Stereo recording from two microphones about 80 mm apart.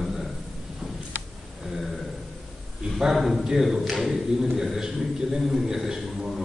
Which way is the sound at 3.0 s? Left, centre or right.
Centre.